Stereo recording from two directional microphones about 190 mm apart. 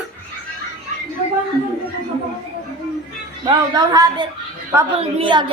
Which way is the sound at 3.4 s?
20° right (ahead or behind).